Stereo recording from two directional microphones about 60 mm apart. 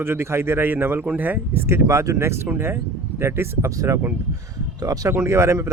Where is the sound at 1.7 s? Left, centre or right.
Right.